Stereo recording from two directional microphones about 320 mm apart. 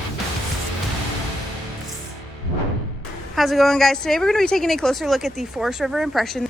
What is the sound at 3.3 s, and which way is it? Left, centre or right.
A woman's voice, centre.